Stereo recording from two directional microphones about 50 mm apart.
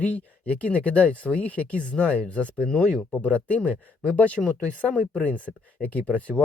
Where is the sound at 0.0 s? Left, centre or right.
Left.